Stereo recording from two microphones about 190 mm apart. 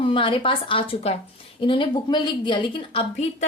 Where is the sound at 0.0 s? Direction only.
25° left (ahead or behind).